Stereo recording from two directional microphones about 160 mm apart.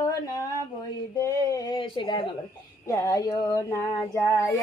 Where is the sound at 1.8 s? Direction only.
30° left (ahead or behind).